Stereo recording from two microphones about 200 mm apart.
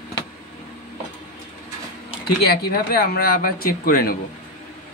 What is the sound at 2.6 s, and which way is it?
Speech, 50° left (ahead or behind).